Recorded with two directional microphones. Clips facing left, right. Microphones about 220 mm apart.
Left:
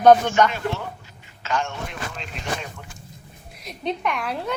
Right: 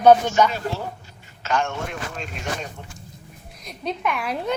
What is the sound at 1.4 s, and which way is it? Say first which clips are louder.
Speech: right 2 dB; 55° right (ahead or behind).